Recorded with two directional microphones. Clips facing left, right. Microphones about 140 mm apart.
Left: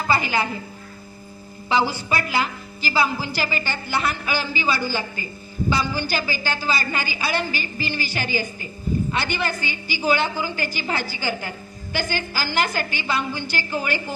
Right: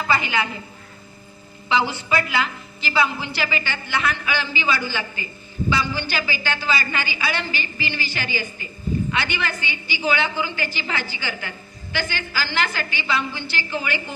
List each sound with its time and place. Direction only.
0.1 s a woman's voice: 40° left (ahead or behind)
1.7 s a woman's voice: 35° left (ahead or behind)